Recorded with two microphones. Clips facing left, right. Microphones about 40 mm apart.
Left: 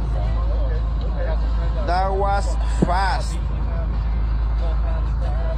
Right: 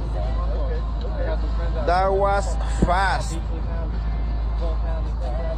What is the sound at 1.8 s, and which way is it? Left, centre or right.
Speech, right.